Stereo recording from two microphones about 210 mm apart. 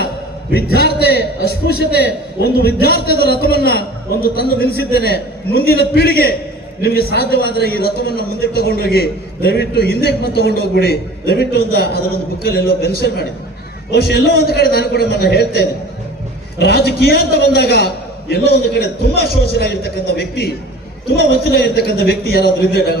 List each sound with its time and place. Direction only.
0.5 s a man's voice: 50° left (ahead or behind)